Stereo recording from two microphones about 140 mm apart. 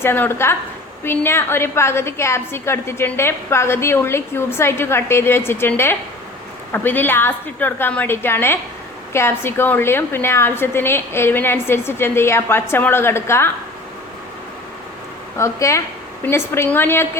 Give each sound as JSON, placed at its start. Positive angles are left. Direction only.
{"t": 0.0, "sound": "a woman's voice", "side_deg": 15}
{"t": 15.4, "sound": "a woman's voice", "side_deg": 20}